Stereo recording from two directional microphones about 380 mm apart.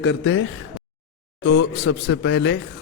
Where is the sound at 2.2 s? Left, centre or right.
Left.